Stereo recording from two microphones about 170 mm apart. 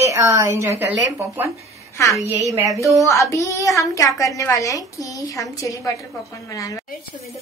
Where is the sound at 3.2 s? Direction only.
20° left (ahead or behind).